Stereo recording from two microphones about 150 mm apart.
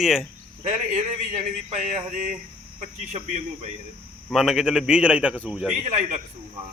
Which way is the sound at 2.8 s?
50° right (ahead or behind).